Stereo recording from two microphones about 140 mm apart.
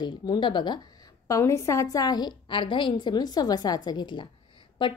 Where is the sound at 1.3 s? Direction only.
20° left (ahead or behind).